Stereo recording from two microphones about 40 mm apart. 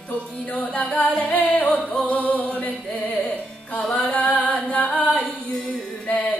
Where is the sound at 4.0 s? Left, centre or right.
Left.